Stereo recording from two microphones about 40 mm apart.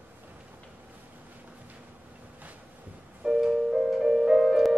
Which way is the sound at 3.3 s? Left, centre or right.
Centre.